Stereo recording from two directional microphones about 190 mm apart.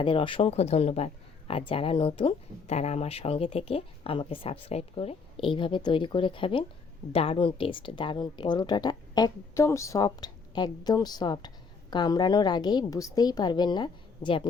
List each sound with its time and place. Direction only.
0.0 s speech: 25° left (ahead or behind)